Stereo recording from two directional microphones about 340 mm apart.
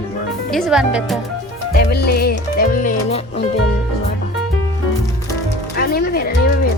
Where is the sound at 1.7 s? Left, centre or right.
Left.